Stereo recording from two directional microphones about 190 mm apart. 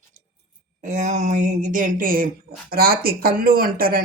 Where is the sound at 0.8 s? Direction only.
40° right (ahead or behind).